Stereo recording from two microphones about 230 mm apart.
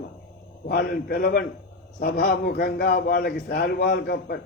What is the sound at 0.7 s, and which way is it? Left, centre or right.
A man's voice, left.